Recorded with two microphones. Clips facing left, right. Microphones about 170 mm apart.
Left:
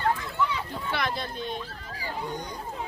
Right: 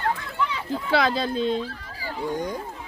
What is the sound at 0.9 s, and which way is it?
Speech, 90° right.